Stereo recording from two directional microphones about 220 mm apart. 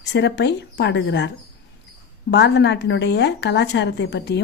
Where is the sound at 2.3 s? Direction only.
50° left (ahead or behind).